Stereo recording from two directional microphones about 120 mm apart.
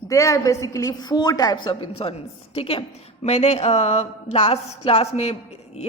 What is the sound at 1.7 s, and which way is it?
A woman's voice, 55° left (ahead or behind).